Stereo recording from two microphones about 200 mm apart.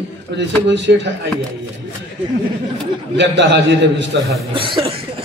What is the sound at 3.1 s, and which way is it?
A man's voice, 60° right (ahead or behind).